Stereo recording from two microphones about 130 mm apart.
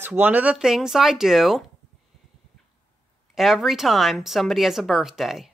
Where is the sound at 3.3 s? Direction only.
Centre (ahead or behind).